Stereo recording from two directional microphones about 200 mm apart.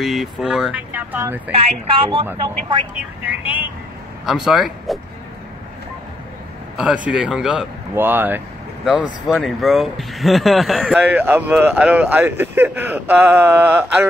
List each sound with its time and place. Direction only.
0.0 s speech: centre (ahead or behind)
1.5 s a woman's voice: 25° right (ahead or behind)
3.3 s speech: 10° right (ahead or behind)
6.8 s speech: 5° right (ahead or behind)